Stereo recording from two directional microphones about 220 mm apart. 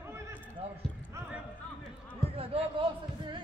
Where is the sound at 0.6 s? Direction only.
25° right (ahead or behind).